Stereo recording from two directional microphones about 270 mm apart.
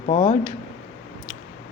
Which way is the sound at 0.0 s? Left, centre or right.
Left.